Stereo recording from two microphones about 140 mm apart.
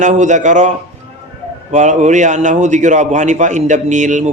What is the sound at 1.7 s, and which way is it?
A man's voice, 60° right (ahead or behind).